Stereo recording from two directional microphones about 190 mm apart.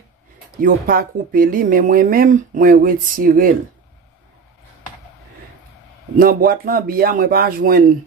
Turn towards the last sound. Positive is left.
turn(degrees=-50)  # may be behind; listen again after turning